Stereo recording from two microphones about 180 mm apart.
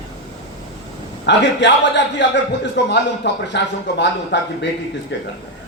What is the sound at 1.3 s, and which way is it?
A man's voice, 75° left (ahead or behind).